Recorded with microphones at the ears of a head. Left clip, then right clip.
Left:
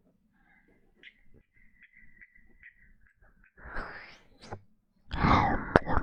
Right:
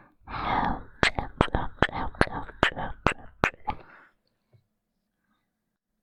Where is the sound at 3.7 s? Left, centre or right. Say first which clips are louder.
Left 7 dB; left.